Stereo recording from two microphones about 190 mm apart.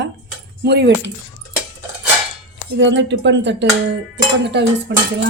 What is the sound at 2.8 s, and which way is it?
Speech, 70° right (ahead or behind).